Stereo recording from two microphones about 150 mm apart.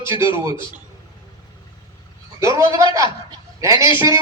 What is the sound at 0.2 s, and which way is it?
Music, 20° right (ahead or behind).